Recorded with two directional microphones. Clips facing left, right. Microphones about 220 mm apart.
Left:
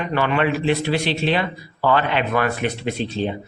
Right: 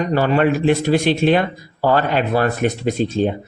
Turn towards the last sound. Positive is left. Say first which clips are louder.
# right 5 dB
turn(degrees=-45)  # may be behind; listen again after turning